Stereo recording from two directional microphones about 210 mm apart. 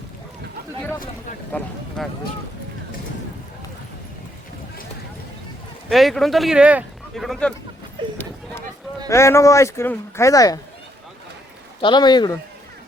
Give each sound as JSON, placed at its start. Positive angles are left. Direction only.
{"t": 1.5, "sound": "speech", "side_deg": 5}
{"t": 5.9, "sound": "speech", "side_deg": 0}
{"t": 8.0, "sound": "run", "side_deg": -25}
{"t": 9.0, "sound": "speech", "side_deg": 15}
{"t": 11.8, "sound": "speech", "side_deg": 20}